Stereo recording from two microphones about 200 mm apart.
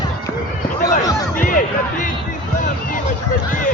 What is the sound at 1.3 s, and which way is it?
Music, 45° left (ahead or behind).